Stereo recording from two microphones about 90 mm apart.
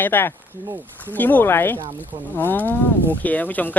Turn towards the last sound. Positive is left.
turn(degrees=20)  # may be behind; listen again after turning